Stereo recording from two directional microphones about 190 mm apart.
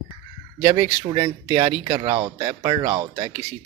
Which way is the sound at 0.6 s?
25° right (ahead or behind).